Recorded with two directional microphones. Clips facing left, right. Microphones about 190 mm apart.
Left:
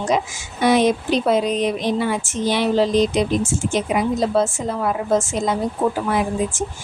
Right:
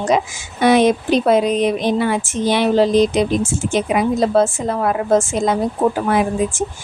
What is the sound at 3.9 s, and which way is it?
A woman's voice, 65° right (ahead or behind).